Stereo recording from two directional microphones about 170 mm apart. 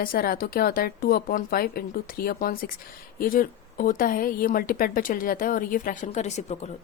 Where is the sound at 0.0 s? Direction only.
60° left (ahead or behind).